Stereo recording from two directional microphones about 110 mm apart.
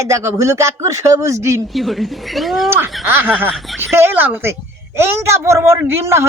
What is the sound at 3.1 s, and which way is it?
Speech, 20° right (ahead or behind).